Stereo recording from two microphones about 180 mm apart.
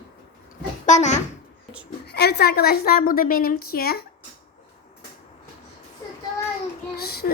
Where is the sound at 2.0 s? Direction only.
65° left (ahead or behind).